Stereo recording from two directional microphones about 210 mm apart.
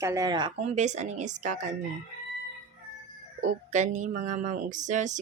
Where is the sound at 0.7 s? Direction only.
35° right (ahead or behind).